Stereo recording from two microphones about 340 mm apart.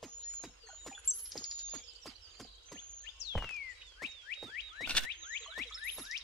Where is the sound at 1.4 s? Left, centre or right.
Centre.